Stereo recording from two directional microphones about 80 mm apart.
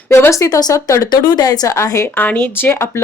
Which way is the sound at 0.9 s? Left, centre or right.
Left.